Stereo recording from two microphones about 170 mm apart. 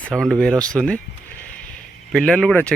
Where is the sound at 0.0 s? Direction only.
5° left (ahead or behind).